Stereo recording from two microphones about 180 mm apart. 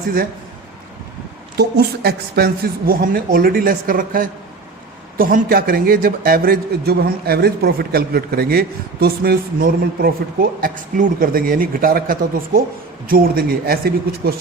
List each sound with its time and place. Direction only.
1.5 s a man's voice: 65° right (ahead or behind)